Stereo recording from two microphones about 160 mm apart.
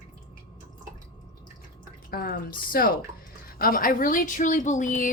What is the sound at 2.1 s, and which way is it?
Speech, 70° left (ahead or behind).